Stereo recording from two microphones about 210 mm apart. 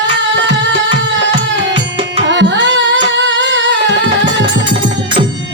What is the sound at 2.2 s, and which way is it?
Music, 60° right (ahead or behind).